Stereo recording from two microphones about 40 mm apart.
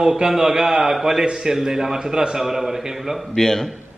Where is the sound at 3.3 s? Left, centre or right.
Centre.